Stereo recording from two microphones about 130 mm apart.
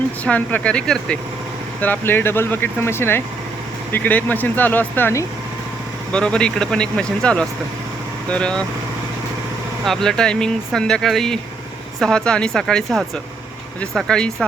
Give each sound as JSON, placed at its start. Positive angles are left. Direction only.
{"t": 0.3, "sound": "speech", "side_deg": 10}
{"t": 9.8, "sound": "speech", "side_deg": 5}